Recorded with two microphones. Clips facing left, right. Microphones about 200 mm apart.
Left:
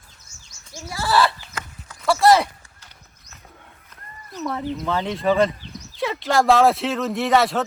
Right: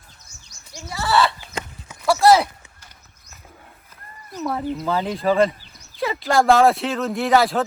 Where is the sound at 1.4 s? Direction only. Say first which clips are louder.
Right 4 dB; 20° right (ahead or behind).